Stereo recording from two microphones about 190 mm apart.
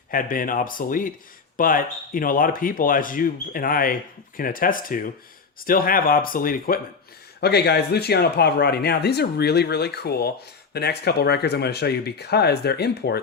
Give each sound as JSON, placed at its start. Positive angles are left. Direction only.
{"t": 0.1, "sound": "speech", "side_deg": 50}
{"t": 7.4, "sound": "speech", "side_deg": 60}